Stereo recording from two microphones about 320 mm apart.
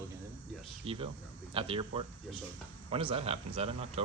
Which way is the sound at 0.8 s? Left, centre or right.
Centre.